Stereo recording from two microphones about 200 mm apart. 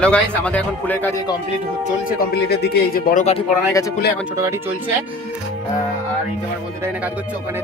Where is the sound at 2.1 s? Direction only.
55° left (ahead or behind).